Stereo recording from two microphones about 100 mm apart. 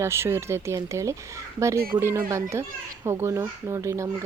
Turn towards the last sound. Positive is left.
turn(degrees=-30)  # may be behind; listen again after turning